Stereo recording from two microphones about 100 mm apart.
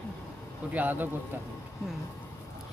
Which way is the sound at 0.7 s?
15° right (ahead or behind).